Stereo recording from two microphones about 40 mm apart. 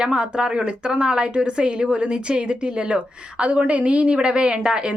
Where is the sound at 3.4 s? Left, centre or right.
Right.